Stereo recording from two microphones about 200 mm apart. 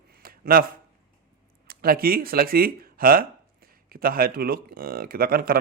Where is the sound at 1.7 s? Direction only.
50° right (ahead or behind).